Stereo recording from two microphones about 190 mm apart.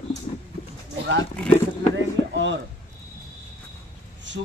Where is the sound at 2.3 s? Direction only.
75° right (ahead or behind).